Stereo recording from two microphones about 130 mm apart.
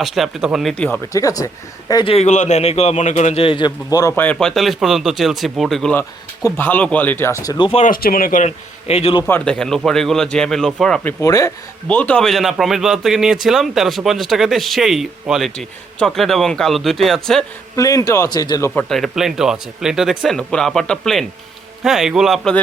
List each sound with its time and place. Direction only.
0.0 s speech: centre (ahead or behind)
1.1 s speech: 25° left (ahead or behind)
2.0 s speech: 55° left (ahead or behind)
3.4 s a man's voice: 40° left (ahead or behind)
3.8 s speech: 25° left (ahead or behind)
4.1 s speech: 10° left (ahead or behind)
5.9 s speech: 15° left (ahead or behind)
7.9 s speech: 90° left; by 9.1 s 55° left (ahead or behind)
9.2 s speech: 10° left (ahead or behind)
11.0 s speech: 25° left (ahead or behind)
11.9 s speech: 10° left (ahead or behind)
17.7 s speech: 25° left (ahead or behind)
18.7 s speech: 5° left (ahead or behind)